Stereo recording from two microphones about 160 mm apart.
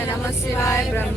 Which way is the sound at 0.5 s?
15° left (ahead or behind).